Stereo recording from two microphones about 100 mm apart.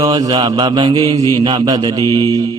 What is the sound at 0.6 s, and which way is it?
Mantra, 50° right (ahead or behind).